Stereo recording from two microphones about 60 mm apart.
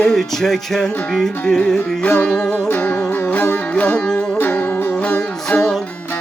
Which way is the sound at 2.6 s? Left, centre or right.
Left.